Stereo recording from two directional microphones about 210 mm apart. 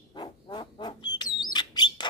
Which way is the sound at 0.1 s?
20° left (ahead or behind).